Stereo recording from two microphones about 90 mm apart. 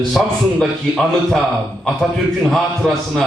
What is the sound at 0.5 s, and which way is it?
Speech, 5° left (ahead or behind).